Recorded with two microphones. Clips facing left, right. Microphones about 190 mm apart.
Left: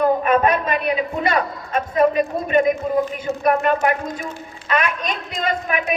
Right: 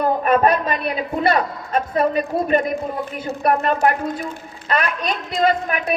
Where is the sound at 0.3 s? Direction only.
35° right (ahead or behind).